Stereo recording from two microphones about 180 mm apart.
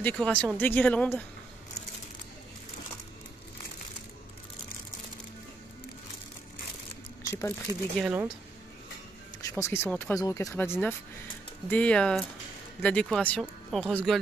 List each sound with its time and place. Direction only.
0.0 s speech: 5° left (ahead or behind)
7.2 s speech: 15° left (ahead or behind)
8.0 s speech: 10° right (ahead or behind)
9.4 s speech: 15° left (ahead or behind)